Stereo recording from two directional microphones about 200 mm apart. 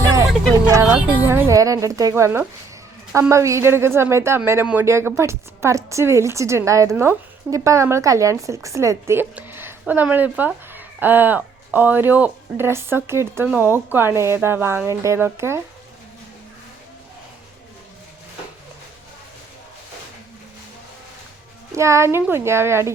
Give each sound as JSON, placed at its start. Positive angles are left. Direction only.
{"t": 0.0, "sound": "a sound", "side_deg": -15}
{"t": 0.7, "sound": "a woman's voice", "side_deg": -15}
{"t": 21.7, "sound": "a woman's voice", "side_deg": -15}